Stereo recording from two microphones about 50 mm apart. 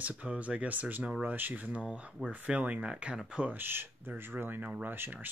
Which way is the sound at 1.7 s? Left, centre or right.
Centre.